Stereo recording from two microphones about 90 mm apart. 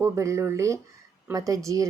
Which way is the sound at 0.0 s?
35° right (ahead or behind).